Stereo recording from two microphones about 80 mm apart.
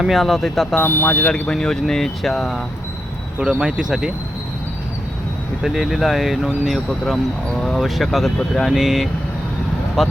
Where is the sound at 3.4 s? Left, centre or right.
Centre.